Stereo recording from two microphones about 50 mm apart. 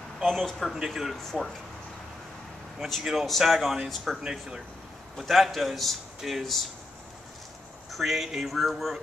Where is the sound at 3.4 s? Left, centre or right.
Centre.